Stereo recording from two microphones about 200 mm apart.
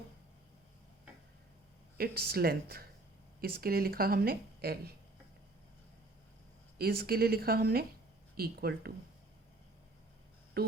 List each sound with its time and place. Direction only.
2.0 s speech: 50° right (ahead or behind)
6.7 s speech: 50° right (ahead or behind)
10.6 s speech: 50° right (ahead or behind)